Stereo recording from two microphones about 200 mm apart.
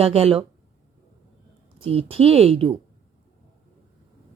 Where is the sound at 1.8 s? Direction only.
30° right (ahead or behind).